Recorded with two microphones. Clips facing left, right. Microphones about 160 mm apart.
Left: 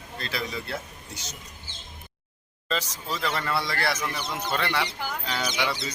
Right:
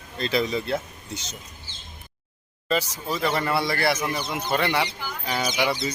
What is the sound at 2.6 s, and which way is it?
Speech, 10° right (ahead or behind).